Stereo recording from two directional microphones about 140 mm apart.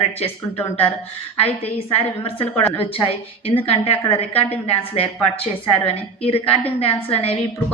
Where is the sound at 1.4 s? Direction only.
45° left (ahead or behind).